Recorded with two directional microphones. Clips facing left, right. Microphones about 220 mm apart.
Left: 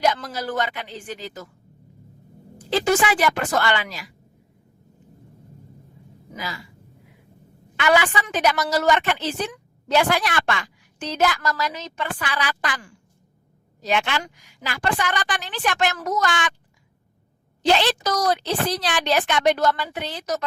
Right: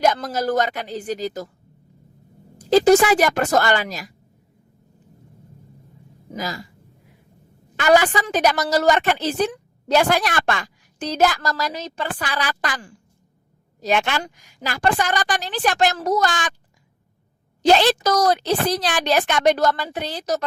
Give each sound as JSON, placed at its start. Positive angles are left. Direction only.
{"t": 0.0, "sound": "a woman's voice", "side_deg": -45}
{"t": 2.6, "sound": "speech", "side_deg": -40}
{"t": 6.3, "sound": "a woman's voice", "side_deg": -40}
{"t": 7.8, "sound": "a woman's voice", "side_deg": -40}
{"t": 17.7, "sound": "a woman's voice", "side_deg": -40}